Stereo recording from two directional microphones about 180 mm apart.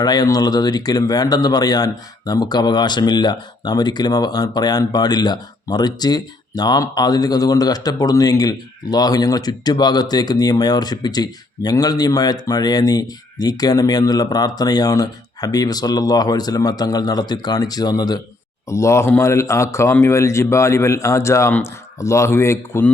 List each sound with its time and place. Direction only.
0.0 s a man's voice: 20° left (ahead or behind)